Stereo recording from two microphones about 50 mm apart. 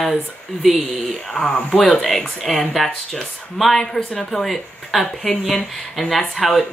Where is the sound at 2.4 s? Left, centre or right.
Centre.